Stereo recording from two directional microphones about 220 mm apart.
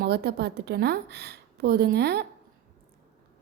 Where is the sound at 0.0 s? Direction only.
50° right (ahead or behind).